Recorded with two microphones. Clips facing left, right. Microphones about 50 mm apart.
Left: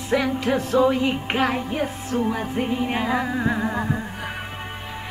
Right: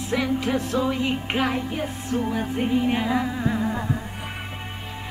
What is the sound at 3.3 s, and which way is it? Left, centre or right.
Music, left.